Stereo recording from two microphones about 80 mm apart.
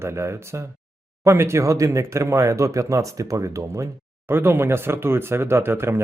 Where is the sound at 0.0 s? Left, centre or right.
Right.